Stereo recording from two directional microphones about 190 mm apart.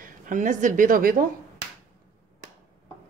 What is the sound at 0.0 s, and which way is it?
A woman's voice, 40° right (ahead or behind).